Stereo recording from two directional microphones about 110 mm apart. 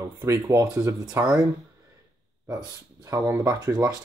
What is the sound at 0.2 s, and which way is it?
Speech, 25° right (ahead or behind).